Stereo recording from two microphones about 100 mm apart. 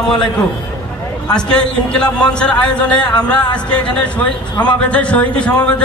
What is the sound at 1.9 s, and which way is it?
Speech, 10° left (ahead or behind).